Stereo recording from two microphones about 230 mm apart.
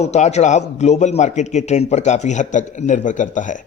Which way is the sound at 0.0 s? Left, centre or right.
Left.